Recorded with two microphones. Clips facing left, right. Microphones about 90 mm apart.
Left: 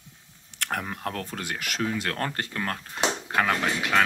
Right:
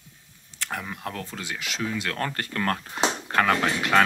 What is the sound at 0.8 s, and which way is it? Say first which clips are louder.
Speech: left 2 dB; 45° left (ahead or behind).